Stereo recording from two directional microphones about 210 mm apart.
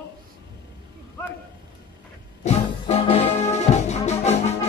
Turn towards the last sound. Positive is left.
turn(degrees=30)  # may be behind; listen again after turning